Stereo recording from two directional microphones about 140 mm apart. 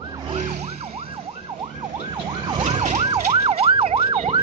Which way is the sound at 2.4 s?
35° right (ahead or behind).